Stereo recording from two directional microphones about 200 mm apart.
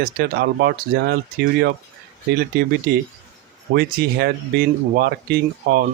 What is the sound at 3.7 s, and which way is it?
Speech, 50° right (ahead or behind).